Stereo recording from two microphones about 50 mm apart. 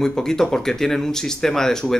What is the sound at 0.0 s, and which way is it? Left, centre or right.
Speech, centre.